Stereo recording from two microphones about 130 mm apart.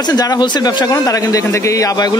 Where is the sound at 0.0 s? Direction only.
30° left (ahead or behind).